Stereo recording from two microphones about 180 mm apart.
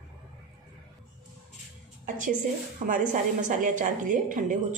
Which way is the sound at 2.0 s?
45° right (ahead or behind).